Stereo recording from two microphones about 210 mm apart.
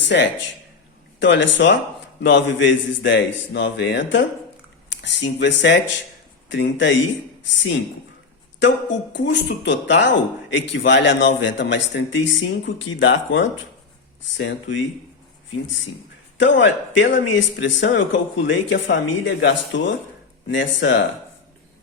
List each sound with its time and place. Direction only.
0.1 s speech: 55° left (ahead or behind)
9.1 s speech: 55° left (ahead or behind)
16.4 s speech: 60° left (ahead or behind)